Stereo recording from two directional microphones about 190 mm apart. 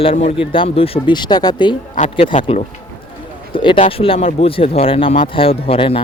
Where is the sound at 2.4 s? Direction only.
40° left (ahead or behind).